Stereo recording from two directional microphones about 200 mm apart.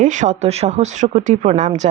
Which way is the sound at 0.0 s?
35° right (ahead or behind).